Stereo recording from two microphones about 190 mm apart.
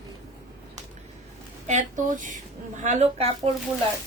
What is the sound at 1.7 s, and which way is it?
Speech, 40° right (ahead or behind).